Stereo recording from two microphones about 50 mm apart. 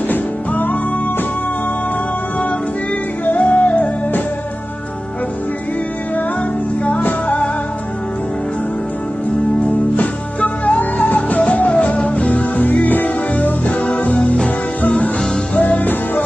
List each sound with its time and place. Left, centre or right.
0.1 s music: left
3.3 s music: left
6.8 s music: left
9.7 s music: left